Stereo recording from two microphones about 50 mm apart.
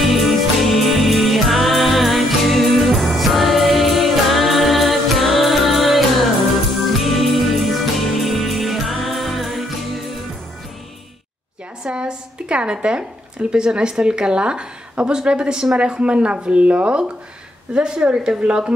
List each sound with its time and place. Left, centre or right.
0.0 s music: centre
11.8 s a woman's voice: centre